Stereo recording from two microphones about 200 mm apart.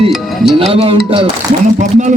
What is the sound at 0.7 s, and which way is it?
A man's voice, 30° right (ahead or behind).